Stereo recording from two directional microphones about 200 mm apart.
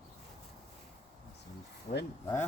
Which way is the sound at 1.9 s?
35° left (ahead or behind).